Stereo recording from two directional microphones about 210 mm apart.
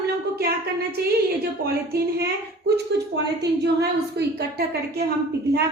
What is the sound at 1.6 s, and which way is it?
A woman's voice, 50° right (ahead or behind).